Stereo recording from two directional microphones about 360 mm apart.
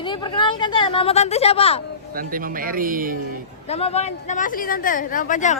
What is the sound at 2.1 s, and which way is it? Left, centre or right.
Music, right.